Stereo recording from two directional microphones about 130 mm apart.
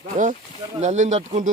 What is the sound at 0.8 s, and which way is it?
Speech, 65° right (ahead or behind).